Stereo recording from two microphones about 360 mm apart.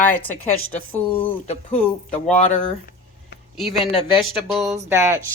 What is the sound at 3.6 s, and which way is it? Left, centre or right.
Speech, centre.